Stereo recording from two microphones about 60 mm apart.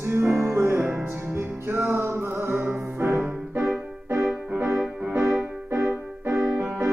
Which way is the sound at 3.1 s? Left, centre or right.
Right.